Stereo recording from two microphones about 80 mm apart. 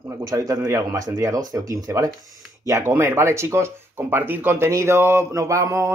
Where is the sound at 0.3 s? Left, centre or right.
Right.